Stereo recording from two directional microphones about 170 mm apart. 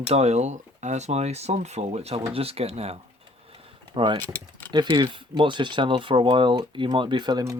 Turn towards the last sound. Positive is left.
turn(degrees=-25)  # may be behind; listen again after turning